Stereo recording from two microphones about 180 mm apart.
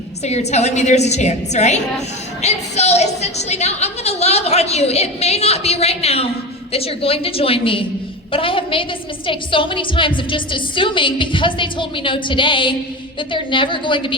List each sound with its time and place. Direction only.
0.3 s a woman's voice: 35° left (ahead or behind)